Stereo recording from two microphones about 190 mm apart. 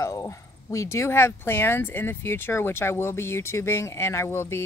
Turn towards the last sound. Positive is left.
turn(degrees=15)  # may be behind; listen again after turning